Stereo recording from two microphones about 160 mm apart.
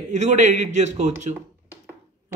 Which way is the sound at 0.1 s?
50° right (ahead or behind).